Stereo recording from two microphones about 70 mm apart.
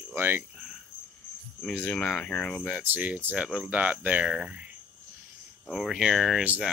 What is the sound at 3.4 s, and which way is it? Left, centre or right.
Speech, centre.